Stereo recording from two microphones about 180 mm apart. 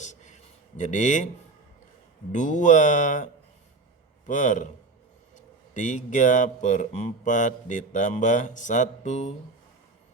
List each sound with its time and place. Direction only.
0.0 s a sound: 40° left (ahead or behind)
0.8 s speech: 45° left (ahead or behind)
2.3 s speech: 45° left (ahead or behind)
4.3 s speech: 45° left (ahead or behind)
5.7 s speech: 45° left (ahead or behind)